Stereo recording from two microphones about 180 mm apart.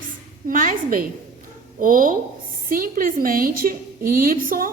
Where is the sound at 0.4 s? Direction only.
50° right (ahead or behind).